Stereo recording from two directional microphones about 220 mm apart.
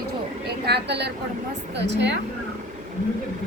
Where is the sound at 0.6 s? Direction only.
50° right (ahead or behind).